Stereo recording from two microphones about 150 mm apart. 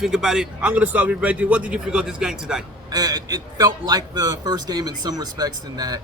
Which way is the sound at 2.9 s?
25° right (ahead or behind).